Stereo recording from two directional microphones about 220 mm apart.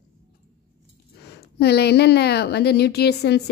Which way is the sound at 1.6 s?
45° left (ahead or behind).